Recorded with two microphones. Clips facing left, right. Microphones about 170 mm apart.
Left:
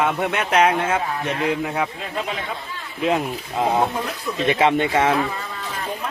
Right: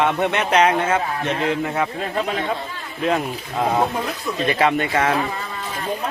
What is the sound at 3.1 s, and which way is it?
Speech, 5° left (ahead or behind).